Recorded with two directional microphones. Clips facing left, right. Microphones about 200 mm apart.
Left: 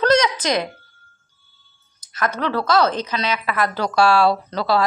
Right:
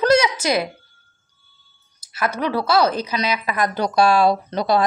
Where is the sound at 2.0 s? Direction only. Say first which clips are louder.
Even; 10° right (ahead or behind).